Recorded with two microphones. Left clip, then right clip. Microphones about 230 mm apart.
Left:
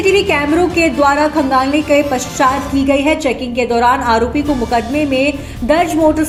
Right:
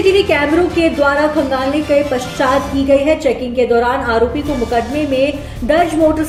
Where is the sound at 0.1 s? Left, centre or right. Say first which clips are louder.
Even; left.